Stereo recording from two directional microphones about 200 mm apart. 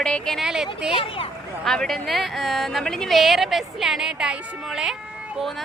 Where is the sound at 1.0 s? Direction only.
25° left (ahead or behind).